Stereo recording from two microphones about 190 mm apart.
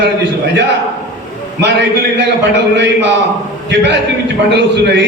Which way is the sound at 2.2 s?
65° right (ahead or behind).